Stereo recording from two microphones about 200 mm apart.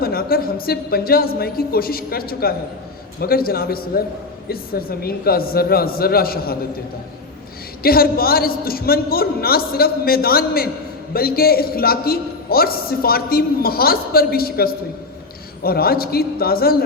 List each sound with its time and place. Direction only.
0.0 s a man's voice: 50° left (ahead or behind)
7.8 s a man's voice: 50° left (ahead or behind)